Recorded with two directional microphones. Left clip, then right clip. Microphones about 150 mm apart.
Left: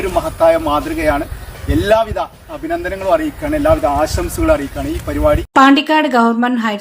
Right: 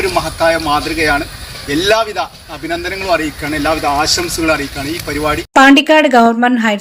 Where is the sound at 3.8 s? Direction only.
30° right (ahead or behind).